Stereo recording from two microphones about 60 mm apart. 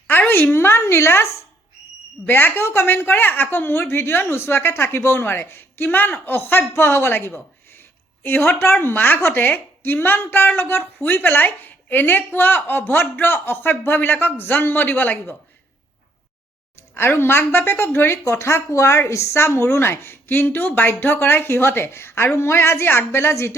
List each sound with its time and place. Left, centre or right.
0.1 s a woman's voice: left
16.9 s a woman's voice: left